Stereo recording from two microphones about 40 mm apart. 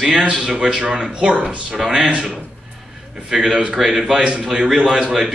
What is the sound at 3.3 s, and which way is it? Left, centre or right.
Speech, centre.